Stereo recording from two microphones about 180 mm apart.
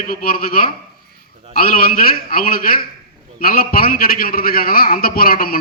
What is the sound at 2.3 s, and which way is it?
A man's voice, 55° left (ahead or behind).